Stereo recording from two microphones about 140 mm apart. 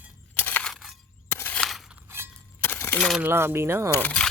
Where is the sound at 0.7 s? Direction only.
Centre (ahead or behind).